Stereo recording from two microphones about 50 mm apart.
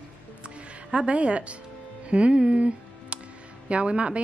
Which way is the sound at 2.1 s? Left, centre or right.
Right.